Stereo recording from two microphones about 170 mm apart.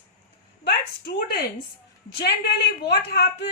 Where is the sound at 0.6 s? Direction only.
70° left (ahead or behind).